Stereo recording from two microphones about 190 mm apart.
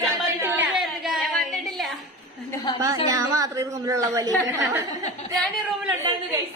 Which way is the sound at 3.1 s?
20° right (ahead or behind).